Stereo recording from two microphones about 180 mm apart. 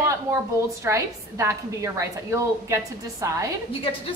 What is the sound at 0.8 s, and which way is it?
A woman's voice, 15° right (ahead or behind).